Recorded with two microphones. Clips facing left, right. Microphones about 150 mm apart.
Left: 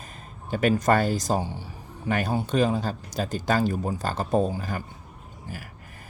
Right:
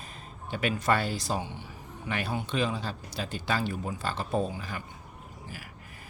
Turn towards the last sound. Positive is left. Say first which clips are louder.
# left 6 dB
turn(degrees=40)  # may be behind; listen again after turning